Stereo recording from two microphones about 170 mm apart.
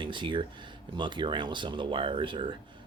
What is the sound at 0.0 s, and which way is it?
Speech, 30° right (ahead or behind).